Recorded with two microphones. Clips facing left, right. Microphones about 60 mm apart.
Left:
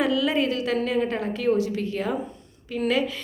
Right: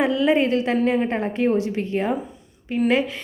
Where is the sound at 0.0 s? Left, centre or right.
Right.